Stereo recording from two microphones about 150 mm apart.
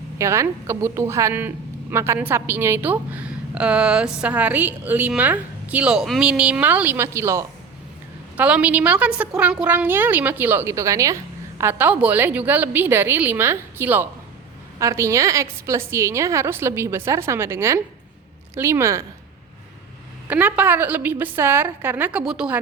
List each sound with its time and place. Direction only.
0.2 s a woman's voice: 20° right (ahead or behind)
20.2 s a woman's voice: 10° right (ahead or behind)